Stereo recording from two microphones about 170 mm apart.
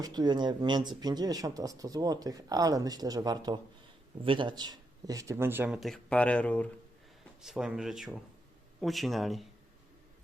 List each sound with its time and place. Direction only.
0.0 s speech: 25° right (ahead or behind); by 6.7 s 10° left (ahead or behind)
7.4 s speech: 5° right (ahead or behind)